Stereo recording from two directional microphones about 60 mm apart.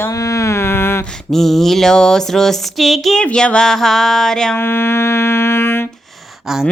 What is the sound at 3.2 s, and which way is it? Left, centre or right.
Speech, centre.